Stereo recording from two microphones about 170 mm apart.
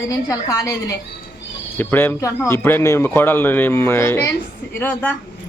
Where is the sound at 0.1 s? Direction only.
20° left (ahead or behind).